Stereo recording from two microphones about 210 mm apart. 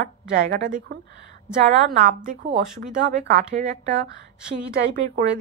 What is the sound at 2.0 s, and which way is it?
A woman's voice, 35° right (ahead or behind).